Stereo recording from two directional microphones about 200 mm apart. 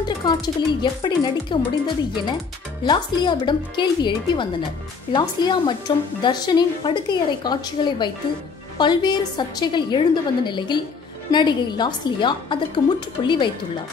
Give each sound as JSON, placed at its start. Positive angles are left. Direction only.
{"t": 0.2, "sound": "a woman's voice", "side_deg": 20}
{"t": 2.8, "sound": "a woman's voice", "side_deg": 20}